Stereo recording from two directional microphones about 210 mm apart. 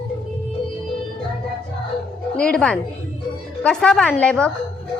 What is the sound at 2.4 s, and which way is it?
A woman's voice, 5° left (ahead or behind).